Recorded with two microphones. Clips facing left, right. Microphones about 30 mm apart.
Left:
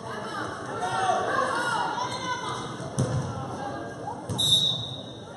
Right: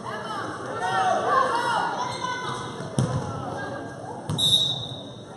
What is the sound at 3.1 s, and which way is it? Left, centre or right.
Basketball bounce, centre.